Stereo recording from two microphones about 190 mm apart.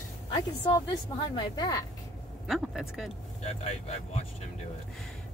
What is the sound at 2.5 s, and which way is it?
Speech, centre (ahead or behind).